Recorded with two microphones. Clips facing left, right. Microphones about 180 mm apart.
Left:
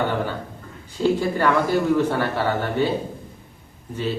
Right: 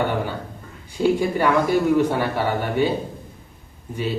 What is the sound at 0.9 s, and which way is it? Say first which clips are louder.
Speech: right 1 dB; 10° right (ahead or behind).